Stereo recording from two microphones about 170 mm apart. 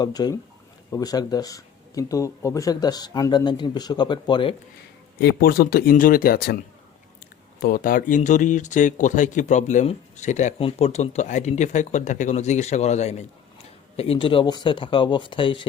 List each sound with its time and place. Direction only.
0.0 s speech: 25° left (ahead or behind)
5.2 s speech: 65° left (ahead or behind)
7.6 s speech: 60° left (ahead or behind); by 15.6 s 30° left (ahead or behind)